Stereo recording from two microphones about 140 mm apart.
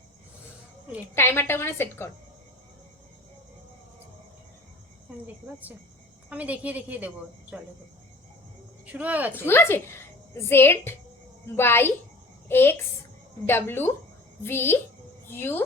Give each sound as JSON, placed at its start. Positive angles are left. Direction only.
{"t": 1.1, "sound": "a woman's voice", "side_deg": 15}
{"t": 6.3, "sound": "a woman's voice", "side_deg": -10}
{"t": 8.9, "sound": "a woman's voice", "side_deg": -10}
{"t": 9.3, "sound": "a woman's voice", "side_deg": 15}